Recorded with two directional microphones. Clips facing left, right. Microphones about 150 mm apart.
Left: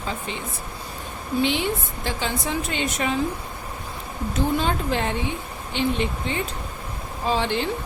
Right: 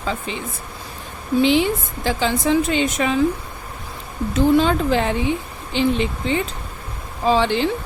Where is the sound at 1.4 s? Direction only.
90° right.